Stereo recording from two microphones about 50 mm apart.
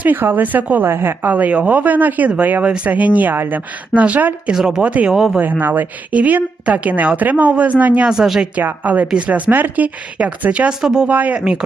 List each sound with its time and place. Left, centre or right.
0.0 s speech: right
0.9 s speech: right
1.2 s speech: right
3.3 s speech: right
3.9 s a woman's voice: right
4.5 s speech: centre
4.8 s a woman's voice: right
8.0 s speech: centre
8.8 s a woman's voice: right
9.5 s speech: right
10.7 s speech: centre
11.1 s speech: right
11.3 s speech: centre